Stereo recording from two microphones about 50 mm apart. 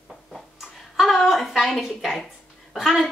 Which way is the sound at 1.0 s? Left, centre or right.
Centre.